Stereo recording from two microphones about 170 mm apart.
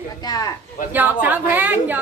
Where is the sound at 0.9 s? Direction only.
10° right (ahead or behind).